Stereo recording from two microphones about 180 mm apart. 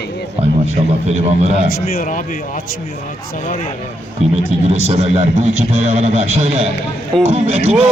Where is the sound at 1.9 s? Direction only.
50° left (ahead or behind).